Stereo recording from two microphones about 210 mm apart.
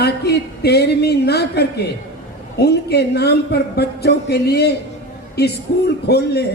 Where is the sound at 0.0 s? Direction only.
50° left (ahead or behind).